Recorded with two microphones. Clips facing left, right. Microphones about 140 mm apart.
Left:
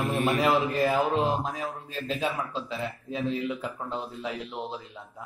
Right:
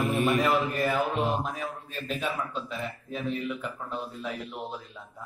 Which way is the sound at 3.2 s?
30° left (ahead or behind).